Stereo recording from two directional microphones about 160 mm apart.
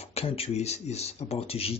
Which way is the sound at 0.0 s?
40° left (ahead or behind).